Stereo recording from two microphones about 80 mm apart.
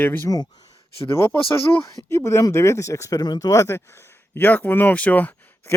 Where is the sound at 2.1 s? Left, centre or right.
Left.